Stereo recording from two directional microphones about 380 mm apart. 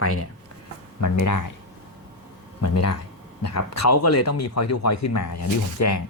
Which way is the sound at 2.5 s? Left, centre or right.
Left.